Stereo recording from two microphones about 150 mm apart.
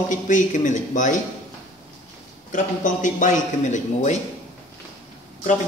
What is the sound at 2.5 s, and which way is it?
A man's voice, 60° left (ahead or behind).